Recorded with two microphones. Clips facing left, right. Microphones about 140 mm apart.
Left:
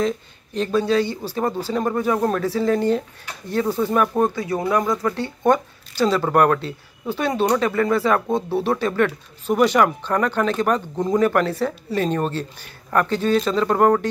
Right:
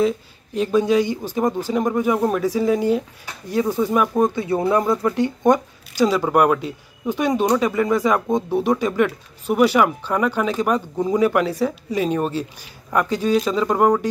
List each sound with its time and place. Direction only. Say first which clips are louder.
0.6 s speech: right 2 dB; 10° right (ahead or behind)
4.4 s speech: right 2 dB; 25° right (ahead or behind)
4.8 s speech: right 3 dB; 10° right (ahead or behind)